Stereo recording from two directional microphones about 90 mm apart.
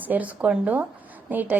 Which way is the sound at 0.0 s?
20° right (ahead or behind).